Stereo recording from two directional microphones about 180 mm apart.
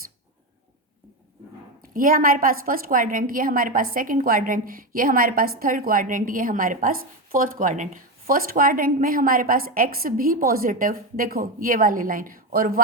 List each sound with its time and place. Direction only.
1.9 s a woman's voice: 50° right (ahead or behind)